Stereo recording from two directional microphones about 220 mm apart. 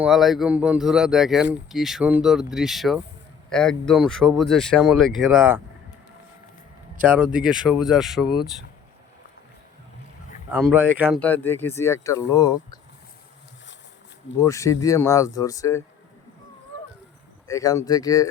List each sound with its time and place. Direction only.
0.0 s speech: centre (ahead or behind)
7.1 s speech: 5° right (ahead or behind)
10.5 s speech: 10° right (ahead or behind)
11.2 s speech: 10° left (ahead or behind)
14.3 s speech: 15° left (ahead or behind)
17.5 s speech: 15° left (ahead or behind)